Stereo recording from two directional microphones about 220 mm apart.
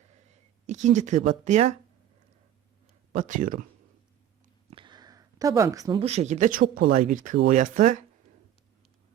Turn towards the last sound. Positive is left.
turn(degrees=-35)  # may be behind; listen again after turning